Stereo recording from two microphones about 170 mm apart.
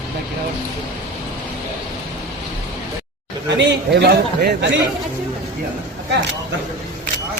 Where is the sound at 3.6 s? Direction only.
85° right.